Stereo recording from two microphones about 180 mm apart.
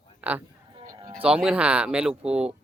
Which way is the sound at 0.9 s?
25° right (ahead or behind).